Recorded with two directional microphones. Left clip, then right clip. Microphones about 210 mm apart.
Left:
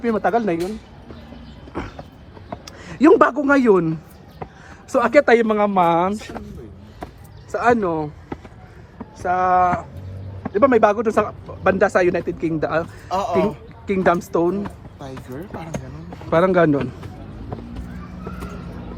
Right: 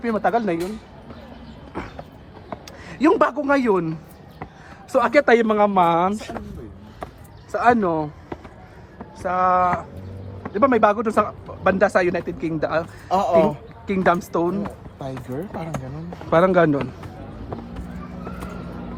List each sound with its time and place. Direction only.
0.0 s speech: 5° right (ahead or behind)
1.7 s a sound: 5° right (ahead or behind)
3.4 s speech: centre (ahead or behind)
7.5 s speech: 10° right (ahead or behind)
9.2 s speech: 5° right (ahead or behind)
13.1 s speech: 50° right (ahead or behind)
13.8 s speech: 5° right (ahead or behind)
14.9 s speech: 45° right (ahead or behind)
16.1 s speech: 10° right (ahead or behind)